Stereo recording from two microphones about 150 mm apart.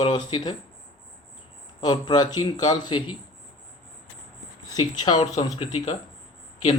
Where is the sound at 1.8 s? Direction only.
25° left (ahead or behind).